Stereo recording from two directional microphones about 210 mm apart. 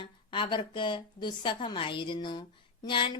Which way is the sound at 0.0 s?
25° left (ahead or behind).